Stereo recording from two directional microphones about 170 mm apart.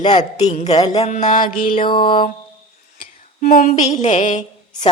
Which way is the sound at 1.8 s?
30° left (ahead or behind).